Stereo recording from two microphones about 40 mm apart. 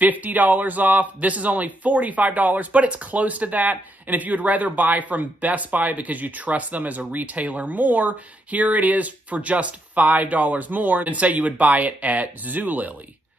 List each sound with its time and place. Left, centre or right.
0.0 s a man's voice: right